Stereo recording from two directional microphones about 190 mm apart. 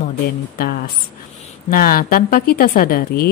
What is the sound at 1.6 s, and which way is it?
Speech, 50° left (ahead or behind).